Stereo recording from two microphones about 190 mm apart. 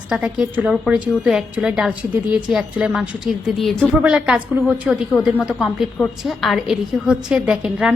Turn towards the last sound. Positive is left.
turn(degrees=-5)  # may be behind; listen again after turning